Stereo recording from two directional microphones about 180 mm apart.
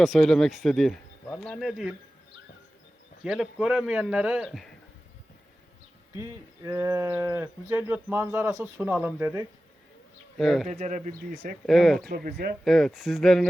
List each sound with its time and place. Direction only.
0.0 s a man's voice: centre (ahead or behind)
3.2 s a man's voice: centre (ahead or behind)
6.1 s speech: 15° right (ahead or behind)
10.3 s a man's voice: centre (ahead or behind)
10.7 s speech: 45° right (ahead or behind)
11.6 s a man's voice: centre (ahead or behind)
12.0 s speech: 55° right (ahead or behind)
12.6 s a man's voice: centre (ahead or behind)